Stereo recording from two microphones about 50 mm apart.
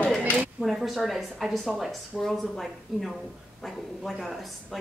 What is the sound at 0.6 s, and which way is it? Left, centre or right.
Speech, centre.